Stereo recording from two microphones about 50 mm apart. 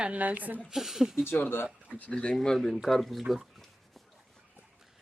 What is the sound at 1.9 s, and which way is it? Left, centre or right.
Speech, left.